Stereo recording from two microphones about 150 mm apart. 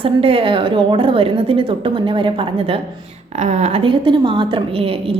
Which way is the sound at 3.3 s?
50° right (ahead or behind).